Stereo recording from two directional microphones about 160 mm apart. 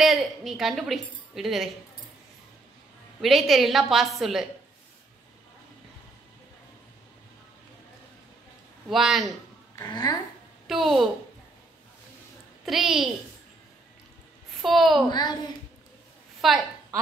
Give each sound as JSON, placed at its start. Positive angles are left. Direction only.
{"t": 0.0, "sound": "a woman's voice", "side_deg": 0}
{"t": 3.2, "sound": "a woman's voice", "side_deg": 0}
{"t": 8.8, "sound": "a woman's voice", "side_deg": 0}
{"t": 9.8, "sound": "speech", "side_deg": 20}
{"t": 10.7, "sound": "a woman's voice", "side_deg": 0}
{"t": 12.6, "sound": "a woman's voice", "side_deg": 0}
{"t": 14.6, "sound": "a woman's voice", "side_deg": 0}
{"t": 15.0, "sound": "speech", "side_deg": 25}
{"t": 16.3, "sound": "a sound", "side_deg": 0}